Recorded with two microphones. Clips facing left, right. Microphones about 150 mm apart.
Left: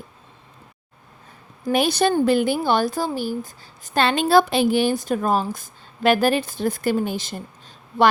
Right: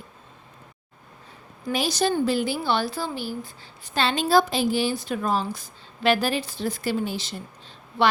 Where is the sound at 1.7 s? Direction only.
55° left (ahead or behind).